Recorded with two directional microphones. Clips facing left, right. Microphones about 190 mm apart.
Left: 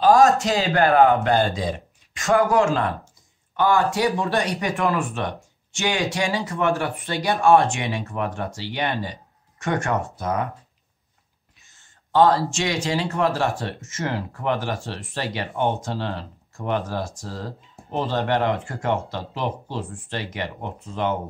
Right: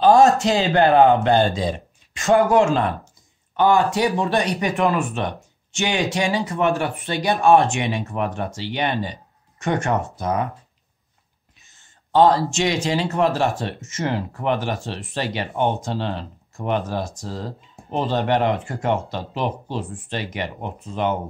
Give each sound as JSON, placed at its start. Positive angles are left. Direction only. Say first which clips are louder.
{"t": 0.0, "sound": "speech", "louder": "right 2 dB", "side_deg": -20}
{"t": 11.7, "sound": "speech", "louder": "right 2 dB", "side_deg": -20}